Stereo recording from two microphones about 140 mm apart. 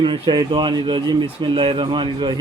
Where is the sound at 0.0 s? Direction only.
35° right (ahead or behind).